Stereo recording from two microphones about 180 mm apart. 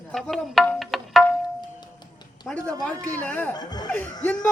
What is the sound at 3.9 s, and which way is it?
Speech, 10° left (ahead or behind).